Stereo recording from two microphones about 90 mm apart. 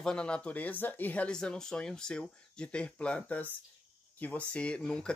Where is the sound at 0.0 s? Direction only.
10° left (ahead or behind).